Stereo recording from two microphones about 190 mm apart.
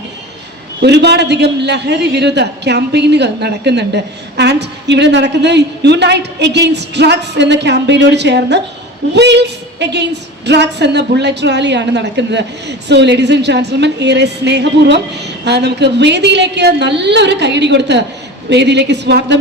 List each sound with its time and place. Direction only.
0.8 s a woman's voice: 60° right (ahead or behind)